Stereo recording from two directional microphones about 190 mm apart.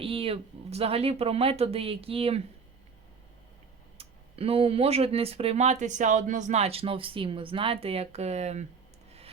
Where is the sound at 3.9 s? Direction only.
30° right (ahead or behind).